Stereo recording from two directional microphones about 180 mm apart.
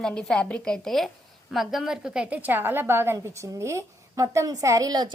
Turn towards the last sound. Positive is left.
turn(degrees=-20)  # may be behind; listen again after turning